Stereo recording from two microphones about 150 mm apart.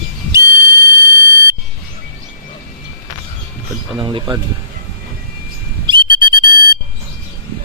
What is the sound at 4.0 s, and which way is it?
Speech, 30° right (ahead or behind).